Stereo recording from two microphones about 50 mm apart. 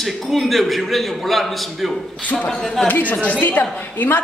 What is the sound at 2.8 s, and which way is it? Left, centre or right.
A man's voice, left.